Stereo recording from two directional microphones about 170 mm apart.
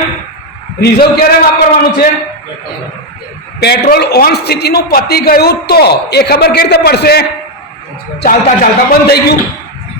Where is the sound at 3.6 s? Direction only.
75° left (ahead or behind).